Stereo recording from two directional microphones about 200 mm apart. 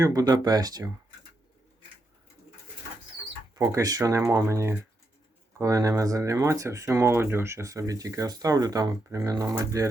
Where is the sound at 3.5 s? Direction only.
20° right (ahead or behind).